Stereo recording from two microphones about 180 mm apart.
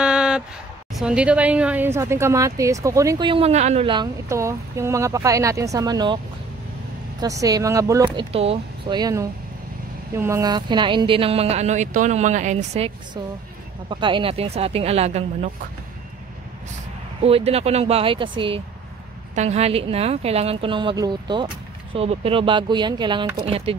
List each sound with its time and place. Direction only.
0.0 s a sound: 5° right (ahead or behind)
0.9 s a woman's voice: 5° right (ahead or behind); by 6.1 s 20° right (ahead or behind)
7.2 s speech: 20° right (ahead or behind); by 12.9 s 40° right (ahead or behind)
13.8 s speech: 25° right (ahead or behind)
17.2 s speech: 35° right (ahead or behind)